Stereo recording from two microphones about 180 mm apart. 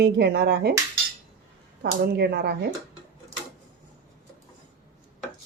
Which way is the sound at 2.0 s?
65° right (ahead or behind).